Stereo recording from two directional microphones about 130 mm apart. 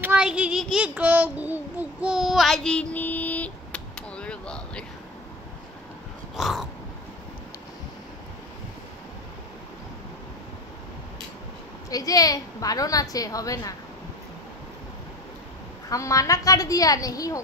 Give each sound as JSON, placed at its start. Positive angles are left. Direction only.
{"t": 0.0, "sound": "child singing", "side_deg": -10}
{"t": 6.3, "sound": "dog", "side_deg": 0}
{"t": 11.9, "sound": "a woman's voice", "side_deg": 30}
{"t": 15.9, "sound": "a woman's voice", "side_deg": 25}